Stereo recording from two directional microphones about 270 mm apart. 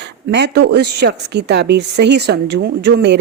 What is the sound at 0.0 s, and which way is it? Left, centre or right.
A woman's voice, right.